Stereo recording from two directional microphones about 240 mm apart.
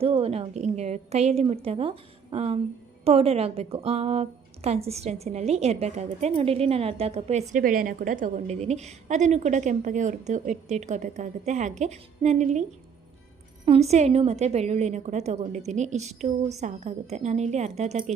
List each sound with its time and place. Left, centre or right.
0.0 s a woman's voice: right
13.7 s a woman's voice: right